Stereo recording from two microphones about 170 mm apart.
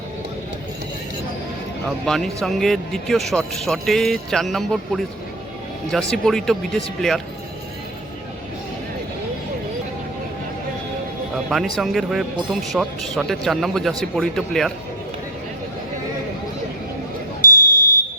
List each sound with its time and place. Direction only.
2.0 s a man's voice: centre (ahead or behind)
11.4 s a man's voice: centre (ahead or behind)
17.5 s smoke detector: 20° right (ahead or behind)